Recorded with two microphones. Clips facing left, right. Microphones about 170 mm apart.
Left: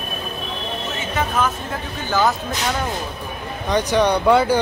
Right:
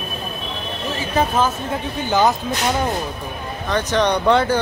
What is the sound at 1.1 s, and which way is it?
Speech, 35° right (ahead or behind).